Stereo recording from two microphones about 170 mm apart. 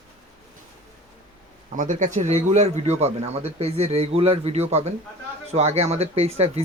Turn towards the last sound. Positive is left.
turn(degrees=-35)  # may be behind; listen again after turning